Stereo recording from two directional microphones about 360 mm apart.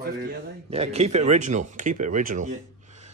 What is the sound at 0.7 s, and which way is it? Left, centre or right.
Speech, centre.